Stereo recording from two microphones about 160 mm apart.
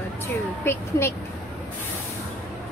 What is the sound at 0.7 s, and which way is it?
Speech, 15° left (ahead or behind).